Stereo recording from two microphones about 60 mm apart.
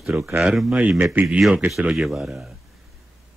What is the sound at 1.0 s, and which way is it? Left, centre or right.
Speech, right.